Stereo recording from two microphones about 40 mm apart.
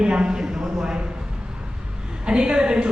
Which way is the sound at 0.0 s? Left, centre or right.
Right.